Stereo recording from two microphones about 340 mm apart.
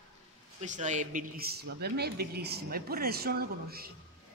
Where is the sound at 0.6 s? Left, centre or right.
Right.